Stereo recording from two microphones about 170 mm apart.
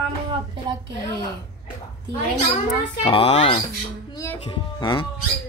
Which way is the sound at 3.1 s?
35° left (ahead or behind).